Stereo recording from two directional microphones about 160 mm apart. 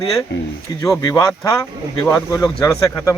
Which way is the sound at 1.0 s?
15° left (ahead or behind).